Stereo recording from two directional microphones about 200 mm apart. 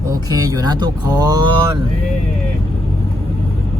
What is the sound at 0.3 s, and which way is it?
Speech, 20° right (ahead or behind).